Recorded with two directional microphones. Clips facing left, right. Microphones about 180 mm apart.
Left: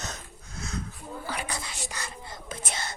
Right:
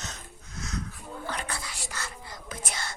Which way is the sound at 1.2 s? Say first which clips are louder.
Even; 10° left (ahead or behind).